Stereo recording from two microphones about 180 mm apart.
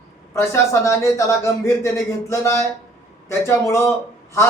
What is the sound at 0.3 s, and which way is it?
A man's voice, 15° left (ahead or behind).